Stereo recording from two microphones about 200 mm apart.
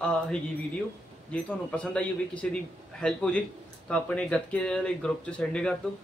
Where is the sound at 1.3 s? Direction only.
5° left (ahead or behind).